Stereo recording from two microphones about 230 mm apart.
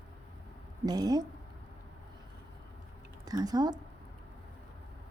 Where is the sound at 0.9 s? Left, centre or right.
Centre.